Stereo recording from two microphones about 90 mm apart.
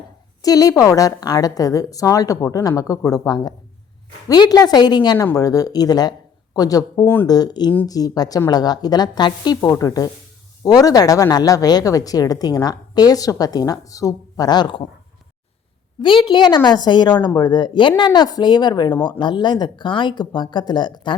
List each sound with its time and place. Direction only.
0.4 s a woman's voice: 45° left (ahead or behind)
5.1 s speech: 35° left (ahead or behind)
7.0 s speech: 25° left (ahead or behind)
7.3 s speech: 45° left (ahead or behind)
9.6 s a woman's voice: 40° left (ahead or behind); by 14.8 s 60° left (ahead or behind)
16.0 s speech: 60° left (ahead or behind)